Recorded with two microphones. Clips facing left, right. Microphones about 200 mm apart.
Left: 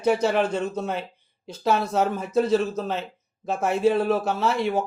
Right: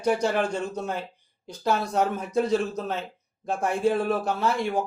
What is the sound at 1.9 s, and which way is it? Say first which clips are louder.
Speech: left 2 dB; centre (ahead or behind).